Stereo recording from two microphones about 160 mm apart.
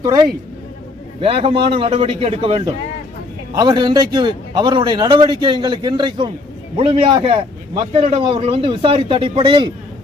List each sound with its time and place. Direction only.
0.0 s a man's voice: 25° right (ahead or behind)
1.2 s a man's voice: 35° right (ahead or behind)